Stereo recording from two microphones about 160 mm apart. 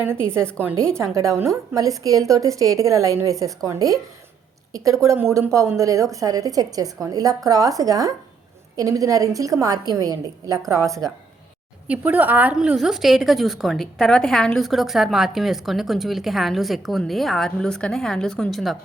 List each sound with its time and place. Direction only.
0.0 s a woman's voice: 15° right (ahead or behind); by 18.8 s centre (ahead or behind)